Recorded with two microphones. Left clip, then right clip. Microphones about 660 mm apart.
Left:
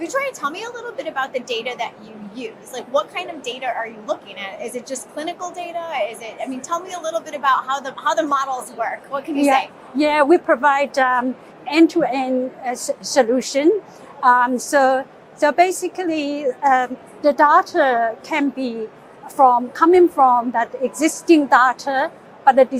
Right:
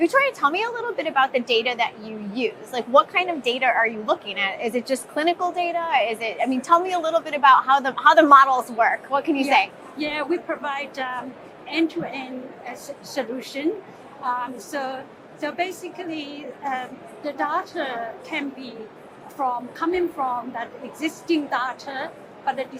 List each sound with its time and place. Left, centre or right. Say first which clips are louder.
0.0 s a woman's voice: right 4 dB; right
10.0 s a woman's voice: left 11 dB; left
14.3 s a woman's voice: left 12 dB; left